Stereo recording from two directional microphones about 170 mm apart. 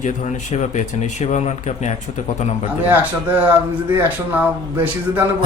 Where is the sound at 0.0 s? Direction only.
45° left (ahead or behind).